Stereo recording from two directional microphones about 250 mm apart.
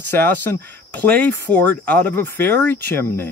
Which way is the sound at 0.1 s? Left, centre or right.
Centre.